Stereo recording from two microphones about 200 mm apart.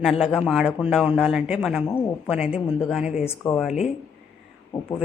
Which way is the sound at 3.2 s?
10° left (ahead or behind).